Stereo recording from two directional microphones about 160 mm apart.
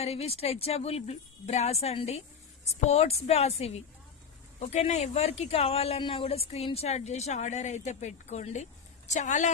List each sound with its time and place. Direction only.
0.0 s speech: 40° left (ahead or behind)
4.7 s a woman's voice: 45° left (ahead or behind)